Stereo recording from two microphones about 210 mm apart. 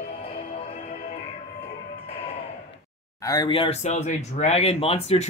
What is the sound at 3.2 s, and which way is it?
Speech, 20° left (ahead or behind).